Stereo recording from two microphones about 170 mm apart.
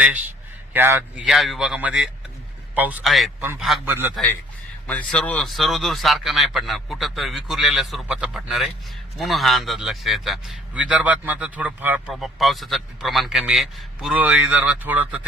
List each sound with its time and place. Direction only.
0.0 s a man's voice: 10° right (ahead or behind)
3.8 s speech: 10° right (ahead or behind)
4.1 s a man's voice: 5° left (ahead or behind)